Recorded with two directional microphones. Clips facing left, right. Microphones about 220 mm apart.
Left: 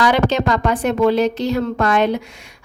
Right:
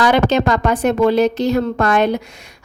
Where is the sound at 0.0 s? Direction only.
45° right (ahead or behind).